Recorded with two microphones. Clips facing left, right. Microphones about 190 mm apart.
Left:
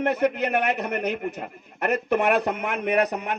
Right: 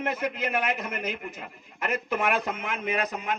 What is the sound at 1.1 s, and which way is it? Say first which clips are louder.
A man's voice: left 8 dB; 50° left (ahead or behind).